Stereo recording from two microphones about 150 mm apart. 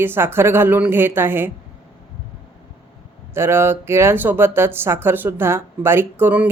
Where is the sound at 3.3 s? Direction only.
15° right (ahead or behind).